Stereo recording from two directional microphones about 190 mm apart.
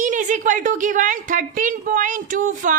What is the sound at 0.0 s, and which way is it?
A woman's voice, 40° right (ahead or behind).